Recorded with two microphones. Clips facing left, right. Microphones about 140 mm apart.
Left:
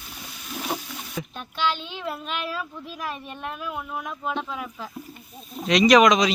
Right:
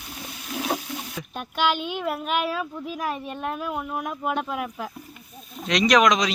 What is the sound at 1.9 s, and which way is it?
Child singing, 10° right (ahead or behind).